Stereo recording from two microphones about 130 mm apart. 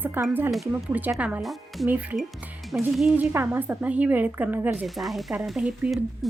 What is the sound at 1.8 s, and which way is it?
A woman's voice, 15° right (ahead or behind).